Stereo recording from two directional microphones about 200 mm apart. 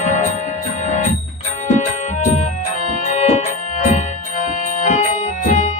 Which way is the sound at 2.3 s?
35° left (ahead or behind).